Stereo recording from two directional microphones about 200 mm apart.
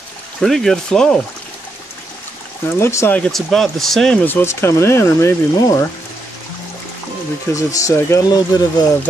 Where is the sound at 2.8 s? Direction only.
15° left (ahead or behind).